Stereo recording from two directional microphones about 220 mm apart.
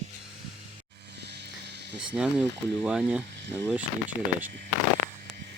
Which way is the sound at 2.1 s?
5° right (ahead or behind).